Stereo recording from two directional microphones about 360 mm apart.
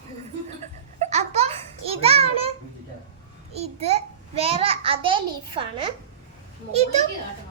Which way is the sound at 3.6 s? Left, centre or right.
Centre.